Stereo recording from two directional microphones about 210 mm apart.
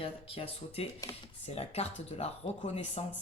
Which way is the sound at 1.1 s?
15° left (ahead or behind).